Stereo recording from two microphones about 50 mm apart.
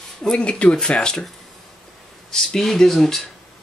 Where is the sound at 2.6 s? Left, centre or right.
Centre.